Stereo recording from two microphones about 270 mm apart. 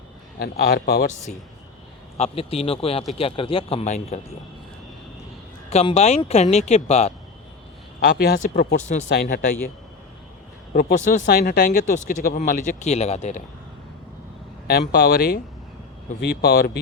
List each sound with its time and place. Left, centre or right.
0.3 s speech: left
5.7 s speech: left
8.1 s speech: left
10.8 s speech: left
14.7 s speech: left